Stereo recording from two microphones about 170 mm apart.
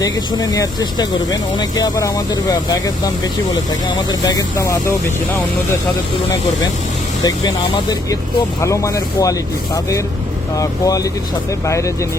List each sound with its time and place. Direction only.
0.0 s speech: 20° left (ahead or behind)
7.3 s speech: 25° left (ahead or behind)
10.6 s speech: 20° left (ahead or behind)